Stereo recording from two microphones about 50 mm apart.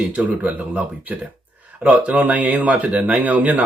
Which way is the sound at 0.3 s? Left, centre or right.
Right.